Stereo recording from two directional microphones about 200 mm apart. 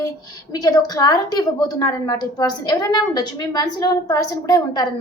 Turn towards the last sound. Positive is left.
turn(degrees=20)  # may be behind; listen again after turning